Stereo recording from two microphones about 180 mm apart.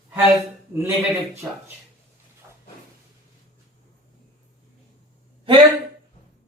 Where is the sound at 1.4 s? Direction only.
10° right (ahead or behind).